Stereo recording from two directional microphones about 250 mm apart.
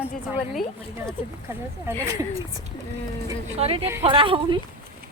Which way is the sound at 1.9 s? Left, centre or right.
Centre.